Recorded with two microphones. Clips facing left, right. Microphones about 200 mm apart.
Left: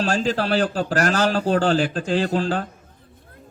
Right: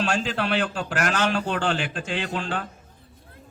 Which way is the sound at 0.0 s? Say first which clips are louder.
Left 4 dB; 35° left (ahead or behind).